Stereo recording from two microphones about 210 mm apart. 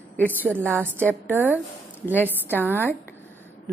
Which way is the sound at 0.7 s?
10° right (ahead or behind).